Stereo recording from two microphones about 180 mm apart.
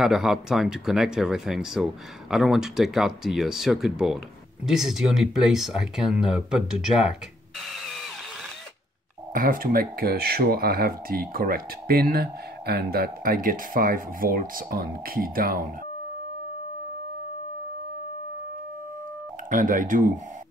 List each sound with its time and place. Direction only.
0.0 s speech: centre (ahead or behind)
7.8 s vehicle: centre (ahead or behind)
9.3 s speech: 50° right (ahead or behind)
19.5 s speech: 45° right (ahead or behind)